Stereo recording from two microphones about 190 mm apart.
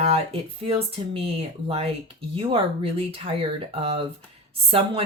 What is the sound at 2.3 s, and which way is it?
A woman's voice, 30° right (ahead or behind).